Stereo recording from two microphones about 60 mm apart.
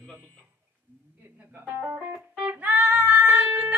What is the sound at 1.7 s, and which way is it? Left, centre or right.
Speech, right.